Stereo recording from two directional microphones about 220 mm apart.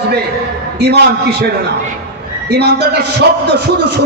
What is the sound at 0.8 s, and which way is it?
Speech, 50° right (ahead or behind).